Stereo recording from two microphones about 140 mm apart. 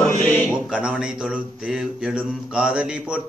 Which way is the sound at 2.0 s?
5° right (ahead or behind).